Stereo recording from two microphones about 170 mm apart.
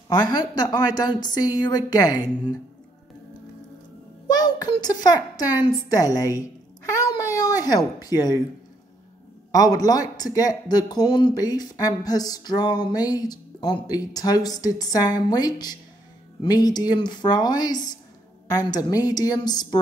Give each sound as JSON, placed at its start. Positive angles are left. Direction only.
{"t": 0.1, "sound": "speech", "side_deg": 25}
{"t": 4.3, "sound": "a child's voice", "side_deg": 20}
{"t": 9.5, "sound": "speech", "side_deg": 20}